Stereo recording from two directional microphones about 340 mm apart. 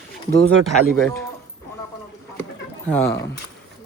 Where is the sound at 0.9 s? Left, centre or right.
Centre.